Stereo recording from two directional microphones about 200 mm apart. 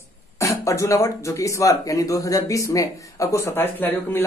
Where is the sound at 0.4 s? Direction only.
15° left (ahead or behind).